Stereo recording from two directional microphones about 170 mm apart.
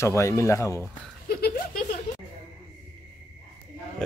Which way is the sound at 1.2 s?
65° left (ahead or behind).